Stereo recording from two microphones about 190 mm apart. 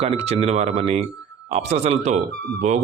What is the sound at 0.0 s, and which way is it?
Speech, 35° right (ahead or behind).